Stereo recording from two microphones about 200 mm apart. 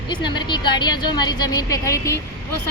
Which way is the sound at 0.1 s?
20° left (ahead or behind).